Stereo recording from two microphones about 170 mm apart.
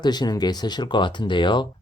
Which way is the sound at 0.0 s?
25° left (ahead or behind).